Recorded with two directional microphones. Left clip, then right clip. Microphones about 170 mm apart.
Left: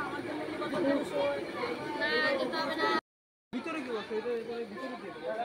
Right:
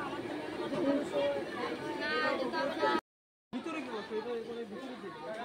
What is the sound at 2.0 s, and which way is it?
Speech, 20° left (ahead or behind).